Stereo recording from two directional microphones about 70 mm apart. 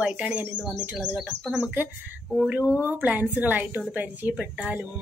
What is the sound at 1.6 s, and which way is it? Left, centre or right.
A woman's voice, right.